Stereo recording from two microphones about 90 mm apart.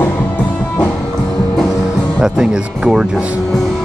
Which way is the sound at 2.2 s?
10° right (ahead or behind).